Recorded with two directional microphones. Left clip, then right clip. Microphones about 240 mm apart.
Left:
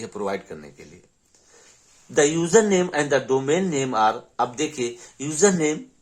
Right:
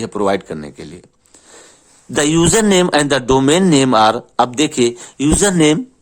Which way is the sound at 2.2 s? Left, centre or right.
Right.